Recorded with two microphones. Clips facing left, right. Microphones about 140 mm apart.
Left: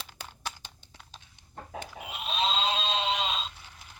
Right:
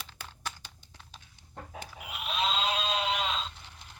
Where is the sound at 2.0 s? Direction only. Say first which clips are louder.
Left 1 dB; 25° left (ahead or behind).